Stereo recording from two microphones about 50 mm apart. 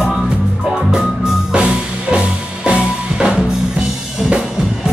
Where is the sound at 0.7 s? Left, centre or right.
Centre.